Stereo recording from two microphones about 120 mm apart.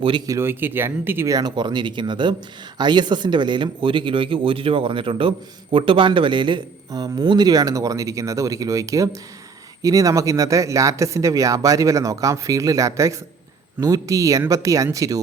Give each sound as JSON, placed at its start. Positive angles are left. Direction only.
{"t": 0.3, "sound": "speech", "side_deg": -20}
{"t": 1.4, "sound": "speech", "side_deg": -35}